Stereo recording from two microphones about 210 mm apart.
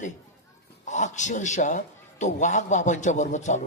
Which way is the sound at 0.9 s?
35° left (ahead or behind).